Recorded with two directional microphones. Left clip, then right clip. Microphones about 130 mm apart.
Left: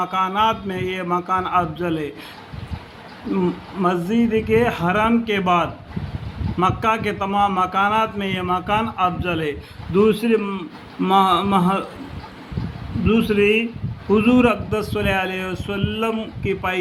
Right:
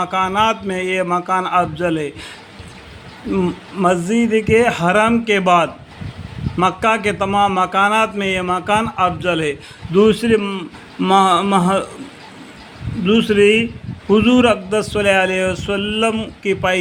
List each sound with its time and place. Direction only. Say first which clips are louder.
0.0 s speech: right 3 dB; 60° right (ahead or behind)
3.4 s speech: right 4 dB; 60° right (ahead or behind)
11.0 s speech: right 3 dB; 60° right (ahead or behind)
13.1 s speech: right 5 dB; 55° right (ahead or behind)